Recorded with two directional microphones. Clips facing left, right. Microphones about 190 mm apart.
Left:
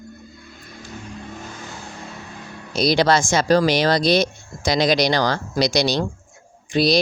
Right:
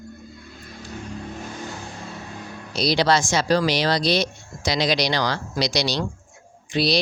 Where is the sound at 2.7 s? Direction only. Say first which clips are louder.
Left 3 dB; 50° left (ahead or behind).